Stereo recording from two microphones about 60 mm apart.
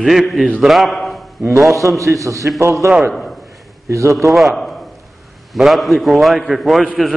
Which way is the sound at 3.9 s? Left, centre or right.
Right.